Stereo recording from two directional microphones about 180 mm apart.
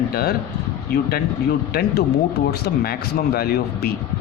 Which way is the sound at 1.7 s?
60° left (ahead or behind).